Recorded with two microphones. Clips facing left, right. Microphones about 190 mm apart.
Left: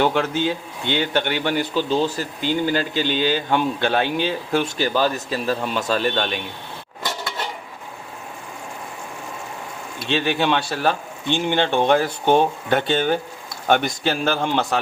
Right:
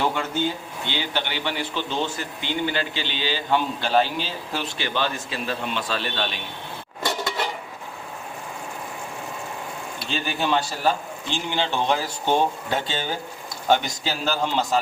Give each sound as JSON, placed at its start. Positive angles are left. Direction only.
{"t": 0.0, "sound": "a man's voice", "side_deg": 70}
{"t": 10.1, "sound": "speech", "side_deg": 75}